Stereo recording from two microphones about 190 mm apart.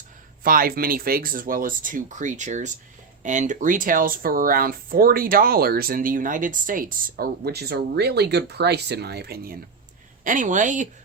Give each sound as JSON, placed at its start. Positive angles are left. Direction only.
{"t": 0.4, "sound": "speech", "side_deg": -50}
{"t": 10.2, "sound": "speech", "side_deg": -40}